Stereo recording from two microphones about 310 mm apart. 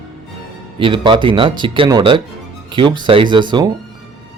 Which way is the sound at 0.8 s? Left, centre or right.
Centre.